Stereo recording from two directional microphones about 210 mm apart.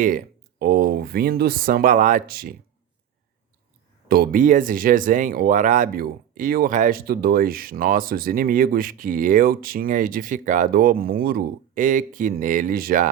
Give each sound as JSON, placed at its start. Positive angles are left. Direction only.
{"t": 0.6, "sound": "speech", "side_deg": -45}
{"t": 4.1, "sound": "speech", "side_deg": -45}